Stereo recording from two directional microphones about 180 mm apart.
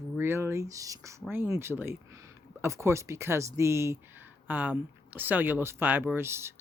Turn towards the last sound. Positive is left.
turn(degrees=-15)  # may be behind; listen again after turning